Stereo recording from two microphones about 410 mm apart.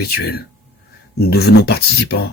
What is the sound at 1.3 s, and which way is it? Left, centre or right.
Speech, left.